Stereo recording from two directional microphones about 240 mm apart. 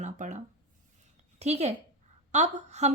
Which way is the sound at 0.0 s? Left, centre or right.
Right.